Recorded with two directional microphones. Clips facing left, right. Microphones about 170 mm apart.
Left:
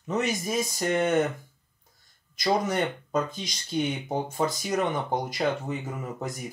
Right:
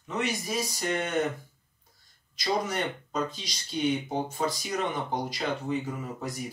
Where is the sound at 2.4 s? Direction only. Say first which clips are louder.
Left 4 dB; 50° left (ahead or behind).